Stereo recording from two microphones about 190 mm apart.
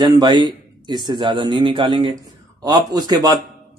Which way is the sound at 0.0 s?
25° right (ahead or behind).